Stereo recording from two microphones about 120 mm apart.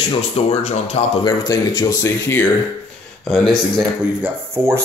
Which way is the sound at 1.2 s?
35° left (ahead or behind).